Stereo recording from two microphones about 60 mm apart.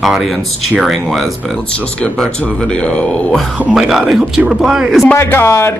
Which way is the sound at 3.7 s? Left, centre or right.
Centre.